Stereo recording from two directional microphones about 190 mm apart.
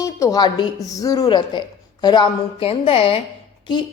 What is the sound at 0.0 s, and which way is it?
A woman's voice, 20° left (ahead or behind).